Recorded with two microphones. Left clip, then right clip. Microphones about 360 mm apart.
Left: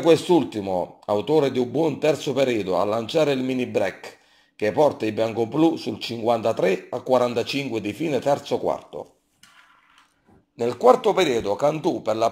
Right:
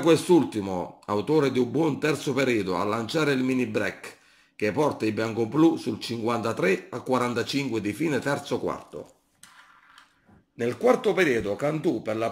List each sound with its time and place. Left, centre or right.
0.0 s speech: centre
10.6 s speech: left